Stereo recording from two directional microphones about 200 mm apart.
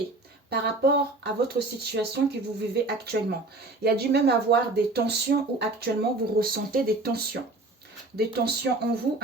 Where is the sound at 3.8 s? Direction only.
55° right (ahead or behind).